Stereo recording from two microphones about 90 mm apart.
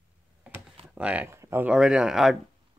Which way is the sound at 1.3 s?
30° right (ahead or behind).